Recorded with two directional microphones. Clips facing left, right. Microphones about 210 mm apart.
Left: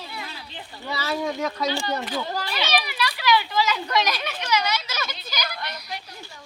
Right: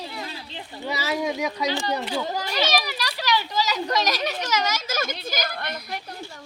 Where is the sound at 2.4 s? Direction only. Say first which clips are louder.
Right 2 dB; 40° right (ahead or behind).